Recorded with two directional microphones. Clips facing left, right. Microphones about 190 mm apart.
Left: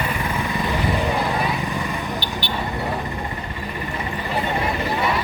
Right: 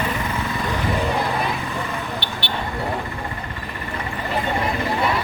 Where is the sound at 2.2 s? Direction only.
65° right (ahead or behind).